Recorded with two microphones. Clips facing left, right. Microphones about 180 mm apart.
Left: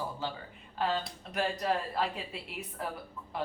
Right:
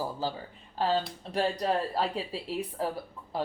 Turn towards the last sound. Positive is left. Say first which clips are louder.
# right 4 dB
turn(degrees=-35)  # may be behind; listen again after turning